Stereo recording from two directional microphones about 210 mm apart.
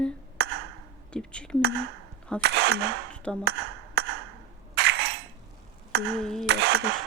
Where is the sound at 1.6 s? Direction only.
50° right (ahead or behind).